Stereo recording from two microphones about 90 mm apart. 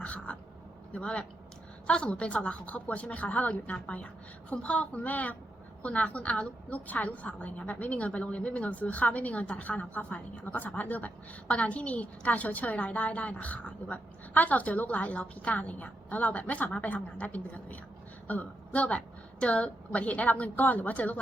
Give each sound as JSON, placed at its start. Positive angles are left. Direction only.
{"t": 0.0, "sound": "a woman's voice", "side_deg": 15}